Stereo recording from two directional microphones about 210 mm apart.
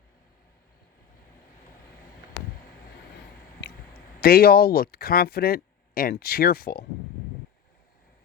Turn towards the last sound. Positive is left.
turn(degrees=45)  # may be behind; listen again after turning